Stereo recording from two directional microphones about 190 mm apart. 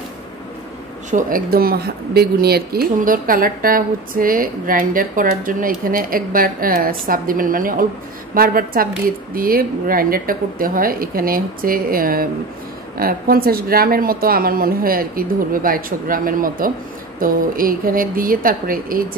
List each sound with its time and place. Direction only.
1.1 s speech: 50° right (ahead or behind)